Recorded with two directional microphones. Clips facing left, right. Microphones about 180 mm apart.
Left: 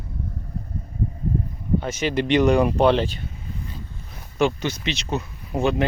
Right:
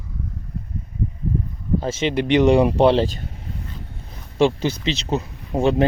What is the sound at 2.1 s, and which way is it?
Speech, 15° right (ahead or behind).